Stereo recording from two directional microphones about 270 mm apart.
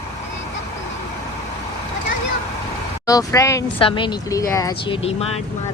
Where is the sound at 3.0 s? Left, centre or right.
Centre.